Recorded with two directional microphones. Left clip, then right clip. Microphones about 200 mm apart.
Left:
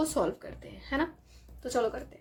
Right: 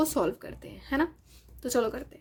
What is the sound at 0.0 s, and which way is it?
Speech, 30° right (ahead or behind).